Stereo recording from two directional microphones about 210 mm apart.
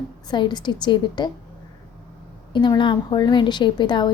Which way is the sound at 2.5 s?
20° left (ahead or behind).